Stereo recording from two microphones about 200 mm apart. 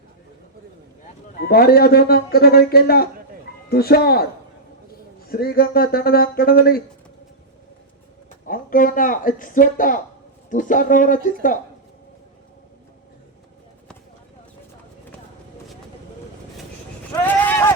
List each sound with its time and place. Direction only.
1.4 s speech: 50° left (ahead or behind)
5.3 s speech: 50° left (ahead or behind)
8.4 s speech: 45° left (ahead or behind)
17.2 s a sound: 10° left (ahead or behind)